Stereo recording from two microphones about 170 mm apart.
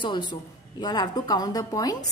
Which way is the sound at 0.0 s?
25° left (ahead or behind).